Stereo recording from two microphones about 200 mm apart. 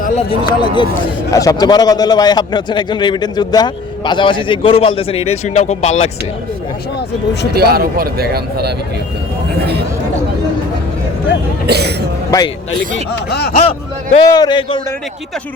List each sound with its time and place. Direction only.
0.0 s a man's voice: 30° left (ahead or behind)
1.3 s a man's voice: 15° left (ahead or behind); by 6.1 s 35° left (ahead or behind)
7.5 s speech: 50° right (ahead or behind)
11.6 s speech: 55° right (ahead or behind)
12.3 s a man's voice: 15° left (ahead or behind)
13.3 s a sound: 55° left (ahead or behind)
13.6 s speech: 35° left (ahead or behind)
14.2 s a man's voice: 20° left (ahead or behind)